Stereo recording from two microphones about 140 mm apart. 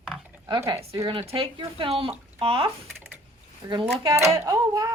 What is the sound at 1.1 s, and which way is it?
Speech, 40° right (ahead or behind).